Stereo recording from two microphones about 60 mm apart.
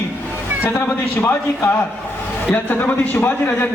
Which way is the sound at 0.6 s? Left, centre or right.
Left.